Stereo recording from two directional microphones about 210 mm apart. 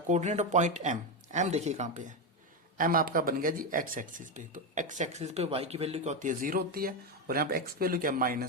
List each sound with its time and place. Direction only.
0.1 s speech: 35° right (ahead or behind)